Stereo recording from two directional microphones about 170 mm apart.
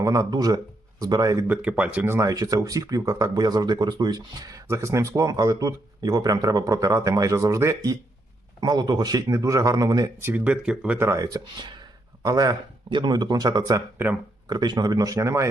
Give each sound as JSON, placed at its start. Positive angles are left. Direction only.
{"t": 0.0, "sound": "speech", "side_deg": -20}
{"t": 1.5, "sound": "speech", "side_deg": -10}